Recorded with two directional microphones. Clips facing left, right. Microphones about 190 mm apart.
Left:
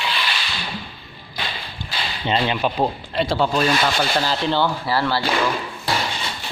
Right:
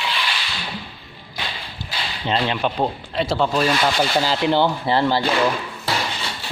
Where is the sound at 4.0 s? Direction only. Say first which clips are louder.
Right 2 dB; 15° right (ahead or behind).